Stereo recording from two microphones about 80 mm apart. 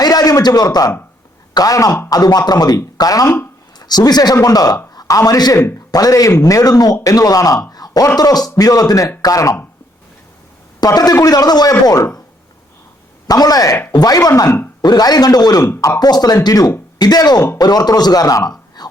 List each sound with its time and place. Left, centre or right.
0.0 s a sound: left
1.5 s a man's voice: left
10.8 s a man's voice: left
13.2 s a man's voice: left
14.8 s a man's voice: left
18.8 s a sound: left